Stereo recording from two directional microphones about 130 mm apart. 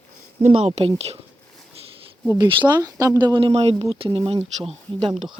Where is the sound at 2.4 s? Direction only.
35° right (ahead or behind).